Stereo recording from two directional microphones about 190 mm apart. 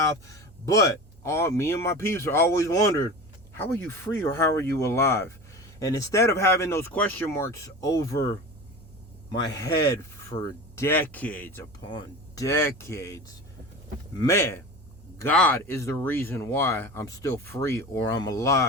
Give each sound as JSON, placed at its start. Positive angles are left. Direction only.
{"t": 0.7, "sound": "speech", "side_deg": 15}
{"t": 9.4, "sound": "speech", "side_deg": 20}
{"t": 11.8, "sound": "speech", "side_deg": 25}